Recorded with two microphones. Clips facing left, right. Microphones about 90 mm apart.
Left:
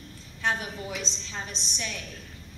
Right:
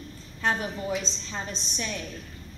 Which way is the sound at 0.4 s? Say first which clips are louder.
Right 2 dB; 40° right (ahead or behind).